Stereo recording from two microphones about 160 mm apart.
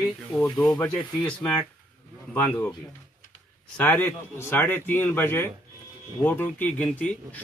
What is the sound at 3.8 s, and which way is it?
A man's voice, 10° left (ahead or behind).